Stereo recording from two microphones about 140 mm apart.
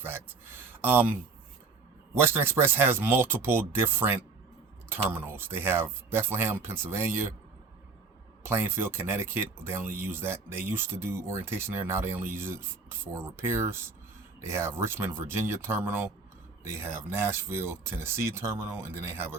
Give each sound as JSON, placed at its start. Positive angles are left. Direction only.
{"t": 0.0, "sound": "speech", "side_deg": -15}
{"t": 8.4, "sound": "speech", "side_deg": -15}